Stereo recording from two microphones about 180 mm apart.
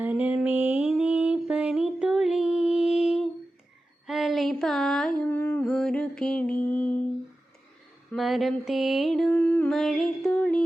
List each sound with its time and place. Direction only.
0.0 s music: 10° right (ahead or behind)
4.0 s a sound: centre (ahead or behind)
8.1 s mantra: centre (ahead or behind)